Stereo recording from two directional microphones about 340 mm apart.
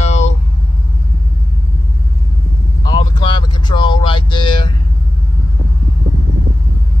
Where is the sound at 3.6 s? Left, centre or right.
Centre.